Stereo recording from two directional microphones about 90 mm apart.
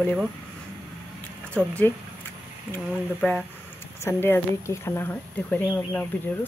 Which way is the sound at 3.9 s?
25° left (ahead or behind).